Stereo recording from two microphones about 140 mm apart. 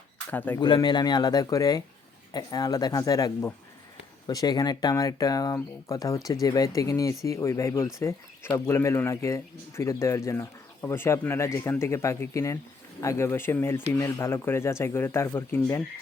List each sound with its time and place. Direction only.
0.3 s speech: 10° left (ahead or behind)
0.6 s speech: 30° left (ahead or behind); by 15.8 s 15° left (ahead or behind)